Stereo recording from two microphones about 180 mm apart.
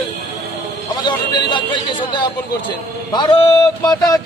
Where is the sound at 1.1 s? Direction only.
25° left (ahead or behind).